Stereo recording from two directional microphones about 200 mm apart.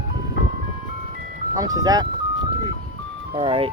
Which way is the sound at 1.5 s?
20° right (ahead or behind).